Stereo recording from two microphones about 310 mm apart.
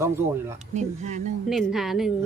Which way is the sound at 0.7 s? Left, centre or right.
Right.